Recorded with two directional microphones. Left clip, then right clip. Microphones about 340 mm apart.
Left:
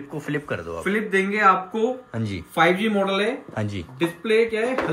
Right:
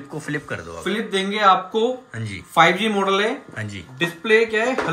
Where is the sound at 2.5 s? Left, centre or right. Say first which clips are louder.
Right 3 dB; centre.